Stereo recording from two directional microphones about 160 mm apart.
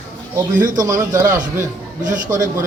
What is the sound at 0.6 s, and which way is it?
Speech, 20° right (ahead or behind).